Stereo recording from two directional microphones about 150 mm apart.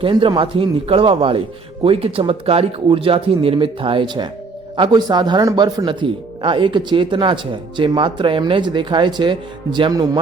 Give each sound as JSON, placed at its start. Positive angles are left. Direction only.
{"t": 0.0, "sound": "speech", "side_deg": -35}